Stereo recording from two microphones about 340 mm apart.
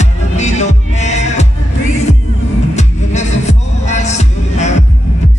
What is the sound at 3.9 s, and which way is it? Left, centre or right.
Music, centre.